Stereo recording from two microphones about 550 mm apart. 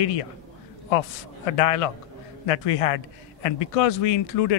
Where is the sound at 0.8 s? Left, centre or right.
Left.